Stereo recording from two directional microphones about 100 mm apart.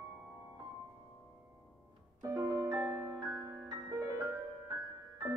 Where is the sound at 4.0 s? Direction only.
30° right (ahead or behind).